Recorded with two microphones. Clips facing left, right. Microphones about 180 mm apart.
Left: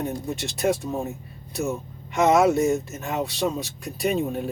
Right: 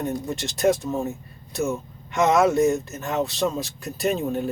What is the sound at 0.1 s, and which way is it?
Speech, centre (ahead or behind).